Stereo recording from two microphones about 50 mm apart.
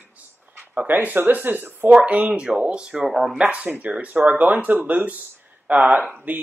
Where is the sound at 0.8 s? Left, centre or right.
Right.